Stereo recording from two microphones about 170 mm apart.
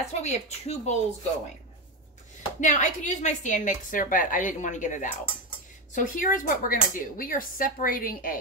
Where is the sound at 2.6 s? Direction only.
45° left (ahead or behind).